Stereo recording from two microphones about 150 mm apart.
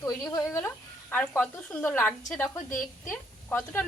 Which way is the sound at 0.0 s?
20° left (ahead or behind).